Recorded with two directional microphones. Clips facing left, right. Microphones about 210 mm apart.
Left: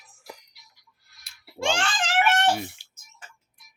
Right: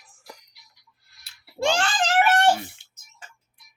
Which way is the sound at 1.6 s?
40° right (ahead or behind).